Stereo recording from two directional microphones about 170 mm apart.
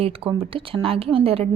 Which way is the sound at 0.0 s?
30° right (ahead or behind).